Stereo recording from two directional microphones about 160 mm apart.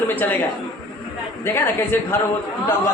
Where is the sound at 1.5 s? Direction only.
15° left (ahead or behind).